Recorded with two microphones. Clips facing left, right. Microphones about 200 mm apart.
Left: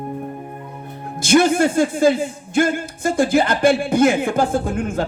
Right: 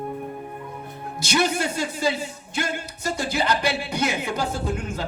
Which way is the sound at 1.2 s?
50° left (ahead or behind).